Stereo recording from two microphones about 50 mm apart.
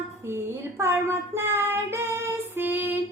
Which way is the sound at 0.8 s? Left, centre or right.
Right.